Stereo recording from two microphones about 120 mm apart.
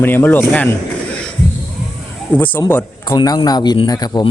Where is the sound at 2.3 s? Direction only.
15° left (ahead or behind).